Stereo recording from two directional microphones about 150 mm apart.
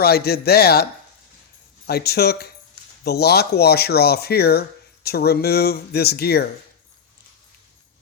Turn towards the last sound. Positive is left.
turn(degrees=90)